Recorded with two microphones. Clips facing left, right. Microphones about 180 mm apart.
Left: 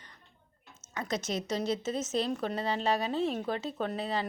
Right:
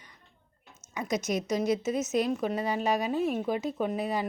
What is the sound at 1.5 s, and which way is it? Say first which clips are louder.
Speech: right 4 dB; 10° right (ahead or behind).